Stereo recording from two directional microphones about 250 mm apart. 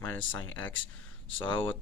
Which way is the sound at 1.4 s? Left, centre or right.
Centre.